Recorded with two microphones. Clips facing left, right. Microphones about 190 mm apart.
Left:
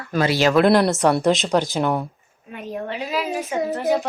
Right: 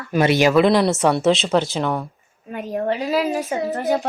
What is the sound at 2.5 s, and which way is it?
A woman's voice, 40° right (ahead or behind).